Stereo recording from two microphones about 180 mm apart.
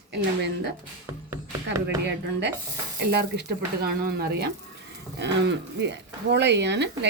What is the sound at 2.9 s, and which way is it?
Speech, 65° right (ahead or behind).